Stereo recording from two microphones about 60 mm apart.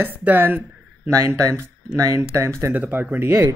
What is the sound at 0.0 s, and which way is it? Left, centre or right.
Speech, right.